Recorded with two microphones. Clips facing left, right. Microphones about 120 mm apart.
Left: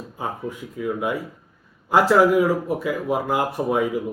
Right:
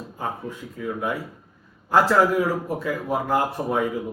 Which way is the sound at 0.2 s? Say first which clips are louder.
Left 2 dB; 15° left (ahead or behind).